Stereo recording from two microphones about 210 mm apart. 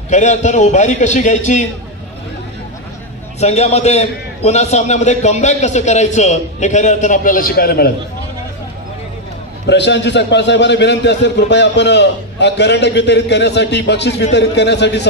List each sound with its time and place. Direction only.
0.1 s a man's voice: 35° left (ahead or behind)
3.3 s a man's voice: 30° left (ahead or behind); by 7.9 s 45° left (ahead or behind)
9.7 s a man's voice: 55° left (ahead or behind)